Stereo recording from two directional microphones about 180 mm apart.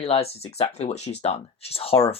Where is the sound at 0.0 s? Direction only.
30° left (ahead or behind).